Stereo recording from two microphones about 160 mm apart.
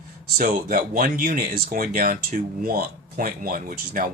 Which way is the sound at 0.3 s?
60° right (ahead or behind).